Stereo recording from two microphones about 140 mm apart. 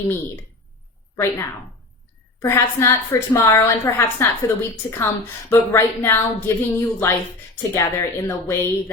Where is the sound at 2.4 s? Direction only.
20° left (ahead or behind).